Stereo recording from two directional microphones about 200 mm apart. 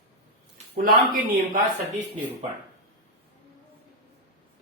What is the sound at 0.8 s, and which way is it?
Speech, 45° right (ahead or behind).